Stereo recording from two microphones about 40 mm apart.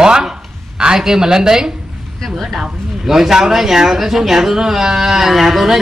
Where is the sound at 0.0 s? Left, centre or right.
Centre.